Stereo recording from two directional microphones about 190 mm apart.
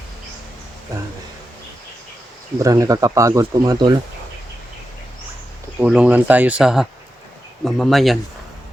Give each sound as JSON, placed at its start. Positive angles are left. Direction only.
{"t": 0.9, "sound": "speech", "side_deg": -15}
{"t": 2.6, "sound": "speech", "side_deg": -15}
{"t": 5.8, "sound": "speech", "side_deg": -5}